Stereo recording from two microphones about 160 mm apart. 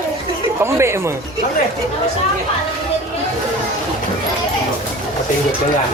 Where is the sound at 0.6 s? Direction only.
15° right (ahead or behind).